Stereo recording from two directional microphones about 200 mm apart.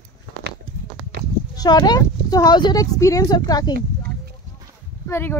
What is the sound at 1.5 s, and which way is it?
Speech, 20° left (ahead or behind).